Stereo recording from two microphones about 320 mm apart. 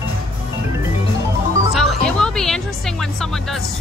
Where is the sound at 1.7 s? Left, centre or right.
Centre.